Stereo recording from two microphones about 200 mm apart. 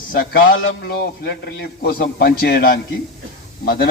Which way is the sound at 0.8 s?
55° left (ahead or behind).